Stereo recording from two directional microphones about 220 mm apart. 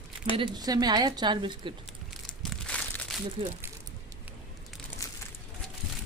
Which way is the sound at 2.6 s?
5° left (ahead or behind).